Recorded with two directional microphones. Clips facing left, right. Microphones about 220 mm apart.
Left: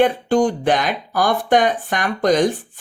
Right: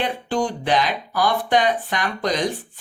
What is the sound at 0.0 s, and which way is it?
Speech, 45° left (ahead or behind).